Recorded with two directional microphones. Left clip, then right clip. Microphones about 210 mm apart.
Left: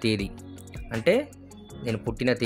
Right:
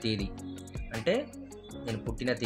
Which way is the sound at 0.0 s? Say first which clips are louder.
Left 7 dB; 55° left (ahead or behind).